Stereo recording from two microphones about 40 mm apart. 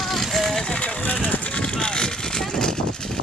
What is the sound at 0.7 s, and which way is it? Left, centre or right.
Vehicle, left.